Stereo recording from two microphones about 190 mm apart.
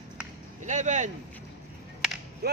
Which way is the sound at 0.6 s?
40° right (ahead or behind).